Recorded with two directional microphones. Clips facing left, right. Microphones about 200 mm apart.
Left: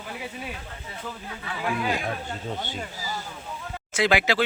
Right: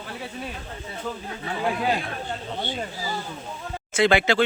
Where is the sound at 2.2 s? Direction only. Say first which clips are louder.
Right 2 dB; 45° left (ahead or behind).